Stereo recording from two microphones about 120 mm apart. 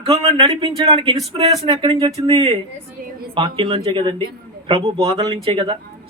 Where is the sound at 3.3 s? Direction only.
45° right (ahead or behind).